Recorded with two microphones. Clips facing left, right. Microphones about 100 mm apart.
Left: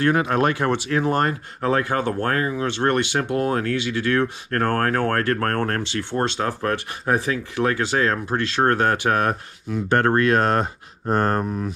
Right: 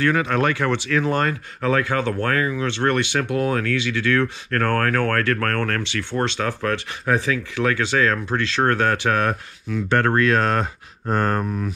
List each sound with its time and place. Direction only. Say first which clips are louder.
0.0 s speech: left 1 dB; 30° left (ahead or behind)
2.2 s speech: even; 35° left (ahead or behind)